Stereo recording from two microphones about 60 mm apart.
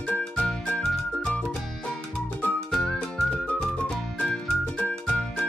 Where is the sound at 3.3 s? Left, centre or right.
Left.